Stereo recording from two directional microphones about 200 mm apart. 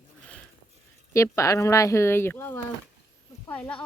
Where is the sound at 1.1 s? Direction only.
15° left (ahead or behind).